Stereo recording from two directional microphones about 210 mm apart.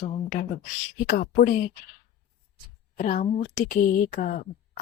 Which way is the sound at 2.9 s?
40° left (ahead or behind).